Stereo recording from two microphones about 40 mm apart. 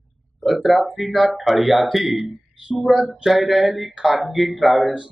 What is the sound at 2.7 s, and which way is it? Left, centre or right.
Speech, centre.